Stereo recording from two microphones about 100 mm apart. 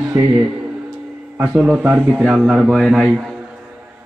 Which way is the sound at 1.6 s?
15° right (ahead or behind).